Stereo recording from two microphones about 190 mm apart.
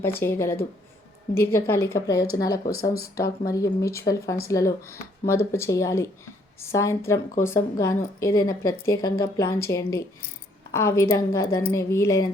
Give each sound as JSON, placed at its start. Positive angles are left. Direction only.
{"t": 0.0, "sound": "speech", "side_deg": 10}
{"t": 1.5, "sound": "speech", "side_deg": 15}
{"t": 2.1, "sound": "speech", "side_deg": 55}
{"t": 2.4, "sound": "speech", "side_deg": 20}